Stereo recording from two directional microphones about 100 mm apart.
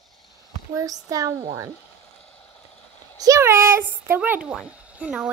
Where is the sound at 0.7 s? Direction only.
35° right (ahead or behind).